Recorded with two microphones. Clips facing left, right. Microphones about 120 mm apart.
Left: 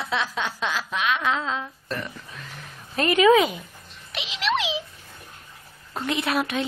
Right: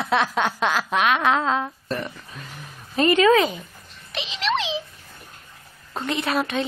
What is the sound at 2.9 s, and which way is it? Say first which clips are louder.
Speech: right 1 dB; 5° left (ahead or behind).